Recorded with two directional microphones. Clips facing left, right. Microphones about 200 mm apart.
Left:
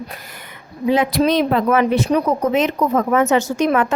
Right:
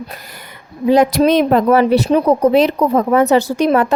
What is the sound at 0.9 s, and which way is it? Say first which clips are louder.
Speech: right 5 dB; 40° right (ahead or behind).